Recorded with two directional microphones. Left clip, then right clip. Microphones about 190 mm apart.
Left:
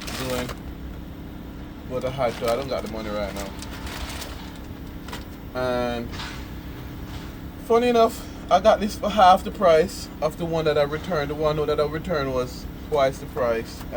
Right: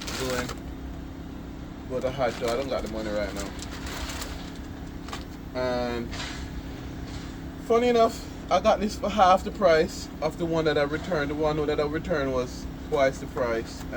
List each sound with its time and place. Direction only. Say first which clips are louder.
2.0 s speech: left 3 dB; 25° left (ahead or behind)
5.6 s a man's voice: left 3 dB; 30° left (ahead or behind)
7.7 s a man's voice: left 3 dB; 30° left (ahead or behind)